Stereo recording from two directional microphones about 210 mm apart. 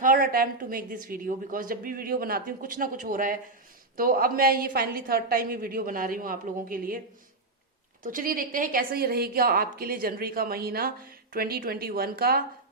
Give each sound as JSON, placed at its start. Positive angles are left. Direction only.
{"t": 0.0, "sound": "a woman's voice", "side_deg": -40}
{"t": 8.0, "sound": "a woman's voice", "side_deg": -40}